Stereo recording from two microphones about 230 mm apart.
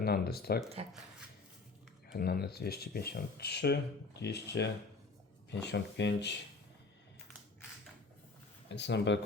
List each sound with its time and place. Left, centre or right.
0.0 s speech: left
2.1 s speech: left
8.7 s speech: left